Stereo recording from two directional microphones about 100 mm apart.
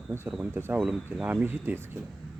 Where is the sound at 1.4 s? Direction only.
20° right (ahead or behind).